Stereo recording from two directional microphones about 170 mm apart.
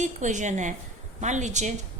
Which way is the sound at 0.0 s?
45° right (ahead or behind).